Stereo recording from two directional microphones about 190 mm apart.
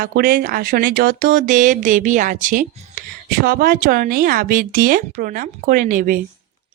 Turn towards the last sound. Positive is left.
turn(degrees=-45)  # may be behind; listen again after turning